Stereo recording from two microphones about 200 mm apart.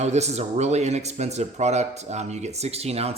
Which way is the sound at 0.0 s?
35° right (ahead or behind).